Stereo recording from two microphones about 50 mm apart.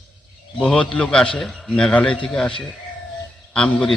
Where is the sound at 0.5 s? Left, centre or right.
Left.